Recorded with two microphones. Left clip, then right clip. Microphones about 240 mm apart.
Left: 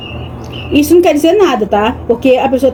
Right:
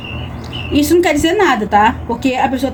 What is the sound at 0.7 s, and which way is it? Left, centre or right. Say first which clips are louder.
A woman's voice: left 4 dB; right.